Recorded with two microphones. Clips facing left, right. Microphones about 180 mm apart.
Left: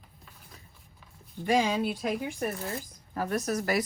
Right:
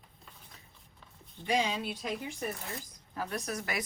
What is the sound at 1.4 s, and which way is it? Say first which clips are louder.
Speech: left 5 dB; 50° left (ahead or behind).